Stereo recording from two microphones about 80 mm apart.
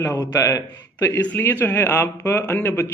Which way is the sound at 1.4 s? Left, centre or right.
Left.